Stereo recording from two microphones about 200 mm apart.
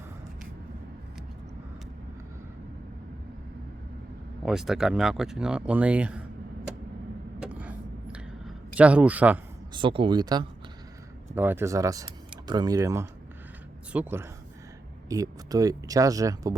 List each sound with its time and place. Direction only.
4.4 s speech: centre (ahead or behind)
7.4 s a sound: 5° right (ahead or behind)
9.7 s speech: 25° right (ahead or behind)